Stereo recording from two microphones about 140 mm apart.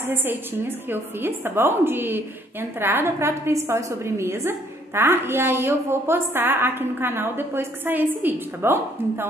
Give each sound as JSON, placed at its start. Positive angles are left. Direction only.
{"t": 0.0, "sound": "a woman's voice", "side_deg": -15}